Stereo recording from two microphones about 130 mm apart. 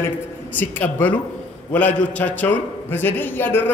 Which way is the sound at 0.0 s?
15° left (ahead or behind).